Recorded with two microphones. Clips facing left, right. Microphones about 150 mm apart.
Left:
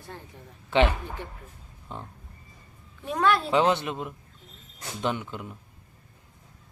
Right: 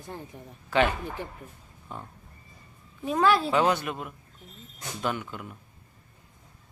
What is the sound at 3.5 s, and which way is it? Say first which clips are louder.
Speech: left 1 dB; 20° left (ahead or behind).